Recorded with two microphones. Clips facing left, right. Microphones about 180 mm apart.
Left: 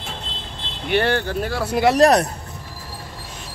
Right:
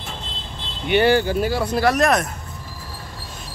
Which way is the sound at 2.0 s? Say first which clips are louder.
Left 8 dB; 35° left (ahead or behind).